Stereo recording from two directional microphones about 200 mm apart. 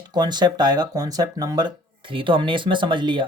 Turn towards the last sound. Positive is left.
turn(degrees=-25)  # may be behind; listen again after turning